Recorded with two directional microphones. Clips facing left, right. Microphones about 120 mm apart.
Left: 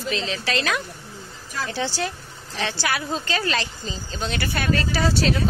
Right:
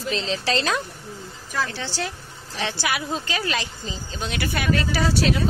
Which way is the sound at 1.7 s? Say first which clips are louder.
Left 4 dB; 10° left (ahead or behind).